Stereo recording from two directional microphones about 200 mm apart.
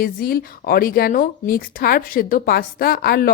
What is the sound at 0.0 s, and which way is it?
Speech, 45° left (ahead or behind).